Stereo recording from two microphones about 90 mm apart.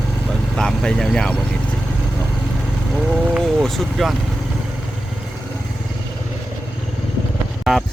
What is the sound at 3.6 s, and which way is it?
Speech, centre (ahead or behind).